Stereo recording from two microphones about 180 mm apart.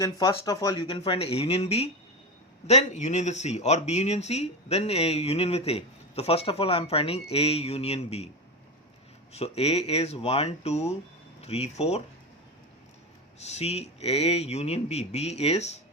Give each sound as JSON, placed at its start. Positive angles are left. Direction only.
{"t": 0.3, "sound": "speech", "side_deg": 20}
{"t": 9.3, "sound": "speech", "side_deg": 35}
{"t": 13.4, "sound": "speech", "side_deg": 35}